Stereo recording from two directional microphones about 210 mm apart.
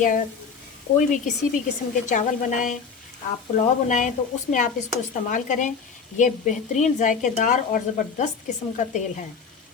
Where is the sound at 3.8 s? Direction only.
35° left (ahead or behind).